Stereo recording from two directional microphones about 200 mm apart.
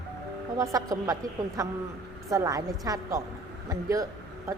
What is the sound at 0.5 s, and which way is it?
A woman's voice, 15° right (ahead or behind).